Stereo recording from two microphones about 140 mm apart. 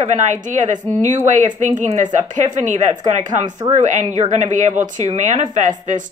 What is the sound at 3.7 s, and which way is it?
Speech, 60° right (ahead or behind).